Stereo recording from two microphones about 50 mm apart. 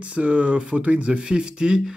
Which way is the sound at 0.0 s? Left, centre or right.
Right.